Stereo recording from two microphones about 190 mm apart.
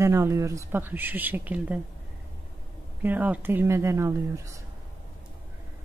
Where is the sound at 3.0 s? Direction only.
10° right (ahead or behind).